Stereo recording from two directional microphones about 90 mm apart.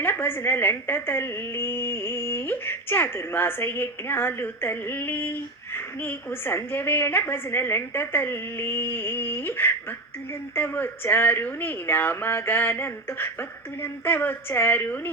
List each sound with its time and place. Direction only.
0.0 s a woman's voice: 20° left (ahead or behind)